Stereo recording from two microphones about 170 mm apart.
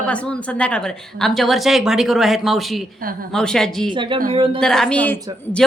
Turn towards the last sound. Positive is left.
turn(degrees=10)  # may be behind; listen again after turning